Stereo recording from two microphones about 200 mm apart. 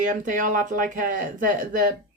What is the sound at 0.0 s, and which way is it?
Speech, 40° right (ahead or behind).